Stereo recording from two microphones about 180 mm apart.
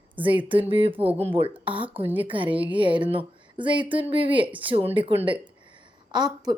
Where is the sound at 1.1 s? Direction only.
35° right (ahead or behind).